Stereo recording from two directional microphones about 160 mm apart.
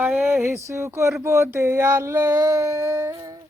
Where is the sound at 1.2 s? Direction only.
15° right (ahead or behind).